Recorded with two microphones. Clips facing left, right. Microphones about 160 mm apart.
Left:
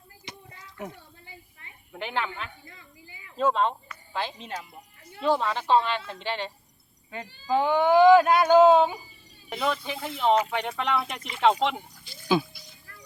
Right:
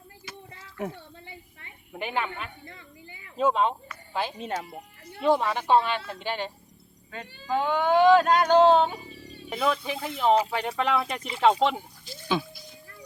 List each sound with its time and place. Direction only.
0.3 s a sound: 20° left (ahead or behind)
1.9 s speech: 10° right (ahead or behind)
4.5 s speech: 65° right (ahead or behind)
5.3 s speech: 10° right (ahead or behind)
7.1 s speech: 15° left (ahead or behind)
9.0 s cat: 70° right (ahead or behind)
9.5 s speech: 5° right (ahead or behind)
10.3 s speech: 30° right (ahead or behind)
10.6 s speech: 5° right (ahead or behind)
11.2 s speech: 30° right (ahead or behind)